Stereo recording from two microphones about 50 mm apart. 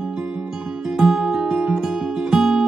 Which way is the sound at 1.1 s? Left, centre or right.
Centre.